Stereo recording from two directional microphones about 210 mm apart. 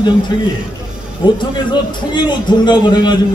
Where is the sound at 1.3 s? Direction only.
20° left (ahead or behind).